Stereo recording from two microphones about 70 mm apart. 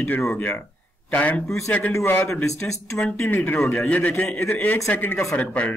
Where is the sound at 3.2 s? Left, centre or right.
Left.